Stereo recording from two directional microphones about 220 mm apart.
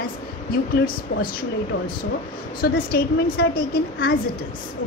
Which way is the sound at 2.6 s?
45° left (ahead or behind).